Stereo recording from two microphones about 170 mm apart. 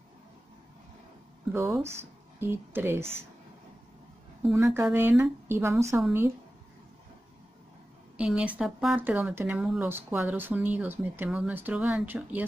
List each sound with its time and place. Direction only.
1.5 s speech: 15° right (ahead or behind)
4.6 s speech: 15° right (ahead or behind)
8.2 s speech: 5° right (ahead or behind)